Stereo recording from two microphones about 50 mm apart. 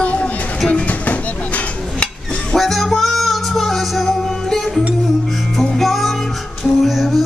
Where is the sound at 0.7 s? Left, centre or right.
Left.